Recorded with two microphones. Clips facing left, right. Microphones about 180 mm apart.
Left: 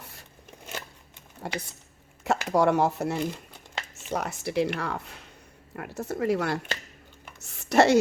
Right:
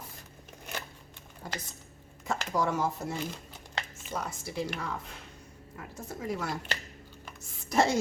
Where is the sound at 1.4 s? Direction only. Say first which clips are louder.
Left 6 dB; 70° left (ahead or behind).